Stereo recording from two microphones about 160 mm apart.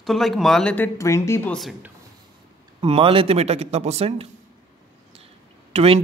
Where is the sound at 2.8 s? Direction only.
35° right (ahead or behind).